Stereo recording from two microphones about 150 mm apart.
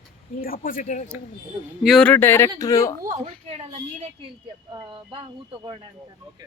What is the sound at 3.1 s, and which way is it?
A woman's voice, 45° right (ahead or behind).